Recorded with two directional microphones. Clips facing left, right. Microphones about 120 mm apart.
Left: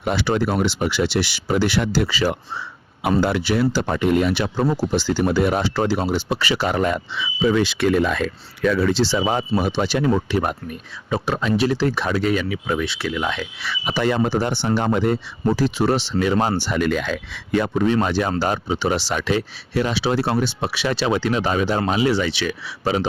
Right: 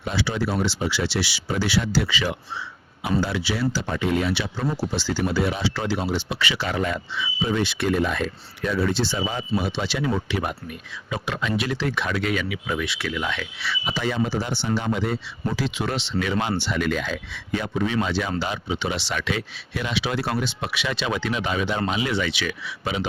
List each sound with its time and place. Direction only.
0.0 s speech: 65° left (ahead or behind); by 2.3 s 40° left (ahead or behind)
3.0 s speech: 60° left (ahead or behind)
7.2 s speech: 90° left
9.6 s speech: 45° left (ahead or behind); by 13.1 s 30° left (ahead or behind)
13.1 s speech: 40° left (ahead or behind)
13.8 s speech: 65° left (ahead or behind)
15.4 s speech: 40° left (ahead or behind)
17.0 s speech: 65° left (ahead or behind)
17.8 s speech: 45° left (ahead or behind)